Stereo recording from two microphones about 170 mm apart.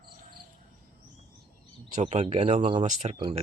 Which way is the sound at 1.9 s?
45° right (ahead or behind).